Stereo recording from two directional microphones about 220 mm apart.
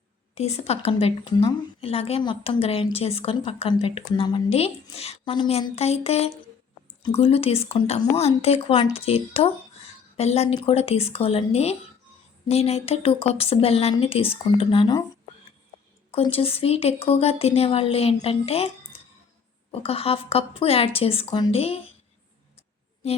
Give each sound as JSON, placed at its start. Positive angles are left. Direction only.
{"t": 0.3, "sound": "a woman's voice", "side_deg": 30}
{"t": 16.1, "sound": "a woman's voice", "side_deg": 25}
{"t": 23.0, "sound": "a woman's voice", "side_deg": 30}